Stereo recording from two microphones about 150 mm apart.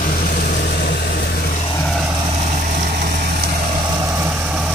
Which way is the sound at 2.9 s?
80° right.